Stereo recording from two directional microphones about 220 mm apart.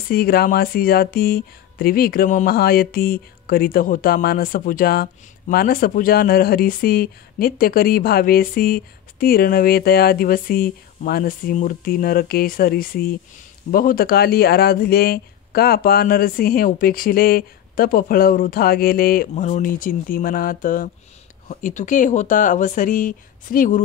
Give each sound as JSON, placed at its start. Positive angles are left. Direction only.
{"t": 0.1, "sound": "speech", "side_deg": 45}